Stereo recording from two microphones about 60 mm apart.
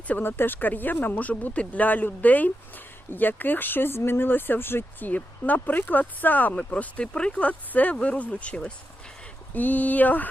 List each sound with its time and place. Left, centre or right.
0.1 s speech: left; by 7.4 s centre
7.4 s speech: left
9.6 s speech: left